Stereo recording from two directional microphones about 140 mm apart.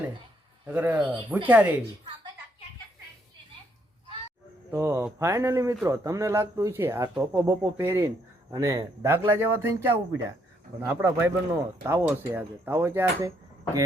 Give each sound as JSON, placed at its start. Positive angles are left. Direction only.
{"t": 0.6, "sound": "speech", "side_deg": -10}
{"t": 4.7, "sound": "speech", "side_deg": -15}